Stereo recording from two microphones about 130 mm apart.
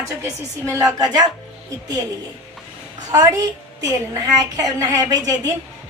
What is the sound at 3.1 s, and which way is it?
A woman's voice, 30° right (ahead or behind).